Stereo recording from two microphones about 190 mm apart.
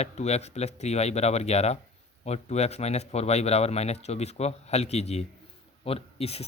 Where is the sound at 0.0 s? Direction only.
35° left (ahead or behind).